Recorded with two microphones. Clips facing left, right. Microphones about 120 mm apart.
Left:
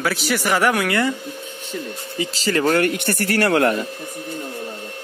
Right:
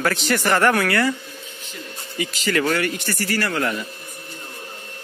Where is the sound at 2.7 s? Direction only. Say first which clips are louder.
Left 4 dB; 55° left (ahead or behind).